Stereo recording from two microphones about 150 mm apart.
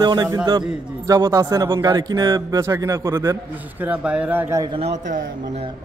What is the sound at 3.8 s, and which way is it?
Speech, 10° right (ahead or behind).